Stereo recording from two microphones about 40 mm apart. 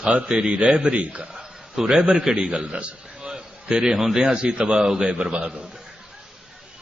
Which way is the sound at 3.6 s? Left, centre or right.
Centre.